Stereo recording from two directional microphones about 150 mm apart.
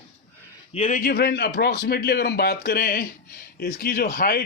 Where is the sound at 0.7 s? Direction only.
40° left (ahead or behind).